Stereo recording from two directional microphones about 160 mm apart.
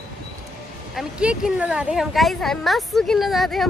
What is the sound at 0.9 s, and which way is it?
Speech, 5° right (ahead or behind).